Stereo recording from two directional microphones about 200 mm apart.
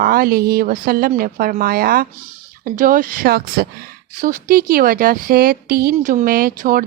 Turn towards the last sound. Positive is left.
turn(degrees=-45)  # may be behind; listen again after turning